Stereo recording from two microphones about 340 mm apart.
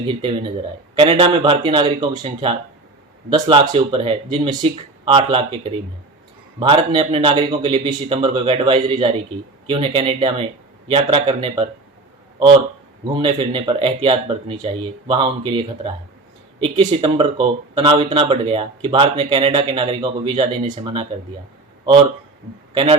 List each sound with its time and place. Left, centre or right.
0.1 s speech: centre
13.1 s speech: centre
22.7 s a man's voice: centre